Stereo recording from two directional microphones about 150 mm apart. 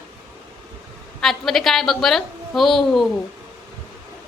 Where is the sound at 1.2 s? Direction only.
Centre (ahead or behind).